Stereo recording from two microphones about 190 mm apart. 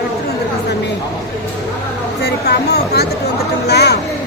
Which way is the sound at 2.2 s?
60° left (ahead or behind).